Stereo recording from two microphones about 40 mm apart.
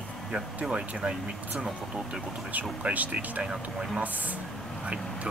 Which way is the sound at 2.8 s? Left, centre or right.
Right.